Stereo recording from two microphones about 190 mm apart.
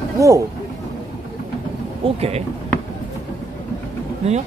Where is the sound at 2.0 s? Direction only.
30° right (ahead or behind).